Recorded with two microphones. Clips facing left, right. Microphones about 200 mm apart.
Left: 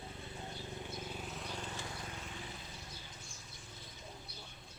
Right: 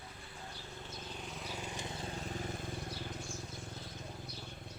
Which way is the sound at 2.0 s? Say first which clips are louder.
Right 6 dB; 35° right (ahead or behind).